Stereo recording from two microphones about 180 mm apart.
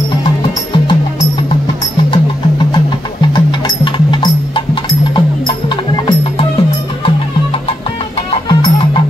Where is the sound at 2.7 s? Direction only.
25° left (ahead or behind).